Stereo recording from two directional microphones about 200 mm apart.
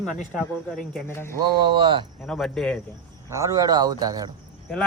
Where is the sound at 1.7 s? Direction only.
25° right (ahead or behind).